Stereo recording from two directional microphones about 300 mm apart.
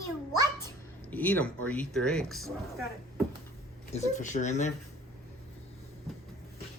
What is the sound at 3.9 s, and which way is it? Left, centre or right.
Speech, left.